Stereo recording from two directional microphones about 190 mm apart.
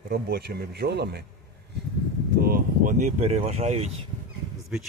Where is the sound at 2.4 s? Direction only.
50° right (ahead or behind).